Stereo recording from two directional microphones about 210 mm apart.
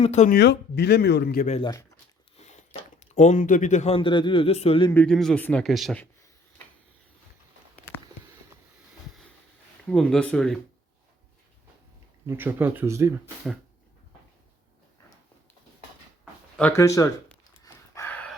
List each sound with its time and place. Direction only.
0.0 s speech: 35° left (ahead or behind)
0.3 s a man's voice: 50° left (ahead or behind)
1.5 s speech: 20° left (ahead or behind)
3.0 s speech: 35° left (ahead or behind)
4.9 s a man's voice: 5° left (ahead or behind)
9.9 s a man's voice: 5° left (ahead or behind)
12.2 s speech: 10° right (ahead or behind)
16.6 s speech: 10° left (ahead or behind)
17.6 s a sound: 15° left (ahead or behind)